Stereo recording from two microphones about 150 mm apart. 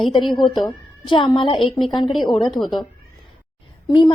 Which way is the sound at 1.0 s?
30° left (ahead or behind).